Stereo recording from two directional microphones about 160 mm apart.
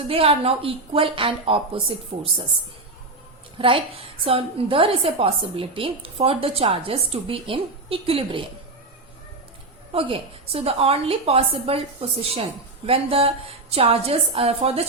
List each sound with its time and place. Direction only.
0.1 s a woman's voice: 35° right (ahead or behind)
3.6 s a woman's voice: 35° right (ahead or behind)
9.9 s a woman's voice: 35° right (ahead or behind)